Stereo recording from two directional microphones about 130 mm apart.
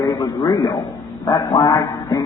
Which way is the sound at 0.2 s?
30° left (ahead or behind).